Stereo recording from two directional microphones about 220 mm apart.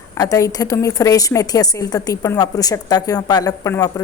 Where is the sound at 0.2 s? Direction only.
15° left (ahead or behind).